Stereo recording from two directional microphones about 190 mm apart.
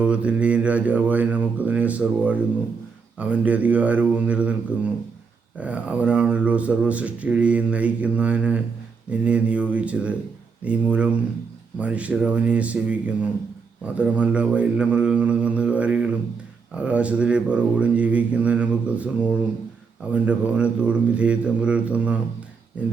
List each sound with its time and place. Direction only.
0.0 s speech: 5° right (ahead or behind)